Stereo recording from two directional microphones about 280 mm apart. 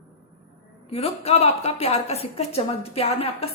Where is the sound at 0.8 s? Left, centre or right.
Left.